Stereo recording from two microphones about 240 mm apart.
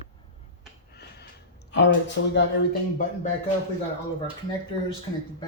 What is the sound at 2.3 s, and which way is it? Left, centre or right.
Speech, left.